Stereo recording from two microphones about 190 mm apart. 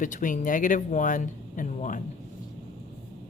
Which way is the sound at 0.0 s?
40° left (ahead or behind).